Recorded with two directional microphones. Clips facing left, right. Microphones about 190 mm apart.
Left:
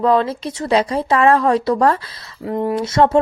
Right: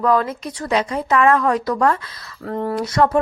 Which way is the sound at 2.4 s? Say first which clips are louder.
Left 3 dB; 15° left (ahead or behind).